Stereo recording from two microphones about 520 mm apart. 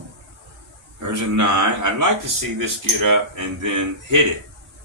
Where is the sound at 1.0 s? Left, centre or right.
Right.